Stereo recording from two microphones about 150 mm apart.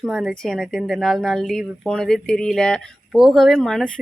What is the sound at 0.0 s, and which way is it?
Speech, centre (ahead or behind).